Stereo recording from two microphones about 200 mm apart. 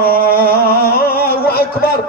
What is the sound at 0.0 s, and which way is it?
Music, 50° left (ahead or behind).